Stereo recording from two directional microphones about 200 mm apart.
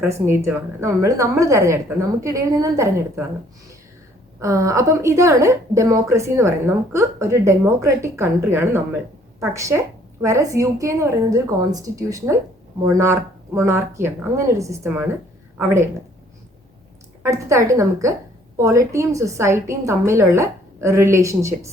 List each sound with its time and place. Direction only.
0.0 s a woman's voice: 10° right (ahead or behind)
4.4 s a woman's voice: 15° right (ahead or behind)
17.2 s a woman's voice: 15° right (ahead or behind)